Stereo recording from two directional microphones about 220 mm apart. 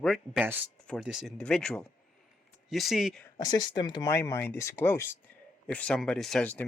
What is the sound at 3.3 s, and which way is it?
Speech, 20° left (ahead or behind).